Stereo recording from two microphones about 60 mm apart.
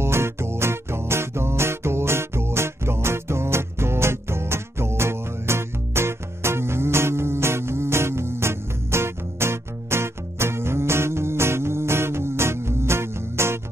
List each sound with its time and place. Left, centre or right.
0.0 s music: right